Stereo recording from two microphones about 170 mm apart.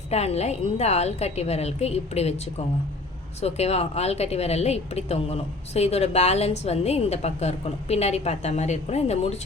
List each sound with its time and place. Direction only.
0.1 s a woman's voice: 40° left (ahead or behind)
3.4 s a woman's voice: 40° left (ahead or behind)